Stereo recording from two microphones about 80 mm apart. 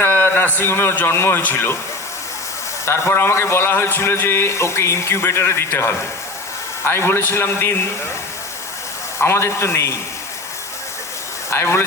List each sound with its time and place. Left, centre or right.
0.0 s a man's voice: left
2.8 s a man's voice: left
9.2 s a man's voice: left
11.5 s a man's voice: left